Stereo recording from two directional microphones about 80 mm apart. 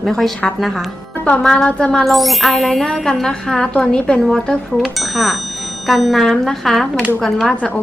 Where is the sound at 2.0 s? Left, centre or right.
Centre.